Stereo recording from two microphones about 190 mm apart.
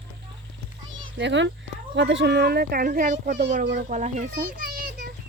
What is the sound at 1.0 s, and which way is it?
A child's voice, 70° right (ahead or behind).